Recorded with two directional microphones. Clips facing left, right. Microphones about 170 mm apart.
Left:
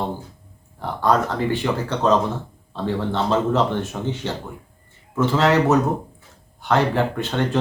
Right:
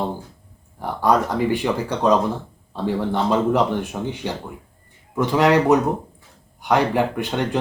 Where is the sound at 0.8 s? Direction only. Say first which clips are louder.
Right 1 dB; 10° right (ahead or behind).